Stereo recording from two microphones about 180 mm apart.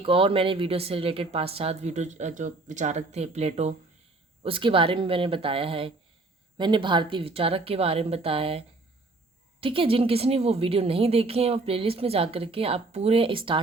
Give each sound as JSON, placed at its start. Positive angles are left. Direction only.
{"t": 0.0, "sound": "a woman's voice", "side_deg": -30}